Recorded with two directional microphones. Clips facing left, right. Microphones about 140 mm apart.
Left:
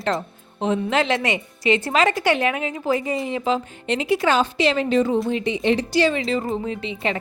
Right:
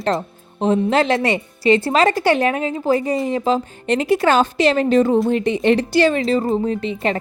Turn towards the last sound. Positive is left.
turn(degrees=-45)  # may be behind; listen again after turning